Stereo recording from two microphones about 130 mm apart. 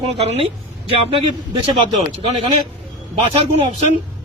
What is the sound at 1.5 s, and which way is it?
A man's voice, 45° right (ahead or behind).